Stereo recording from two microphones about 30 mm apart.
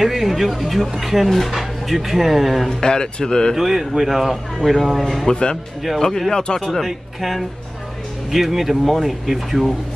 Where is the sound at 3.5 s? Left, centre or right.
Centre.